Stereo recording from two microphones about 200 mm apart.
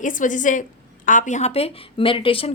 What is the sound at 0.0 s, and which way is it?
Speech, 40° left (ahead or behind).